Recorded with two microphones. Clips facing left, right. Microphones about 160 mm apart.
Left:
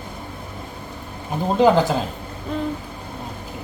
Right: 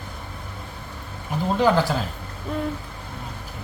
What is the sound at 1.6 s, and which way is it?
Speech, 20° left (ahead or behind).